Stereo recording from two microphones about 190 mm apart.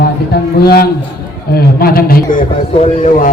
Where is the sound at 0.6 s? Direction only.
55° left (ahead or behind).